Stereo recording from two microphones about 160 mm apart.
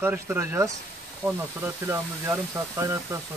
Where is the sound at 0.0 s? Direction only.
15° right (ahead or behind).